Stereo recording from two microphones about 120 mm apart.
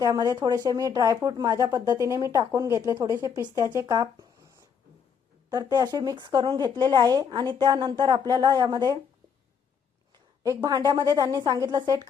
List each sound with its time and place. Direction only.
0.0 s speech: 30° right (ahead or behind)
10.4 s speech: 30° right (ahead or behind)